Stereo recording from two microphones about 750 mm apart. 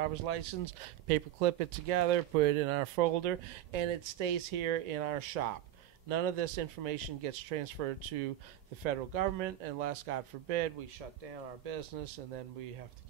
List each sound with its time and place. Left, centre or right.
0.0 s speech: right